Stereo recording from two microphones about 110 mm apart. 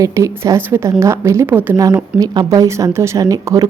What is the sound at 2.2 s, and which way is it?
A woman's voice, 40° right (ahead or behind).